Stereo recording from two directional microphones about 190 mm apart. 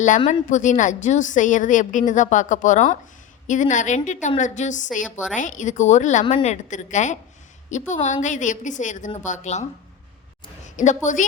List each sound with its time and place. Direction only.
0.2 s a woman's voice: 40° left (ahead or behind)
10.8 s a woman's voice: 40° left (ahead or behind)